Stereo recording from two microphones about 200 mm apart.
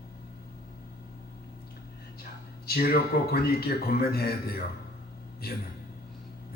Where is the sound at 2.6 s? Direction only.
50° left (ahead or behind).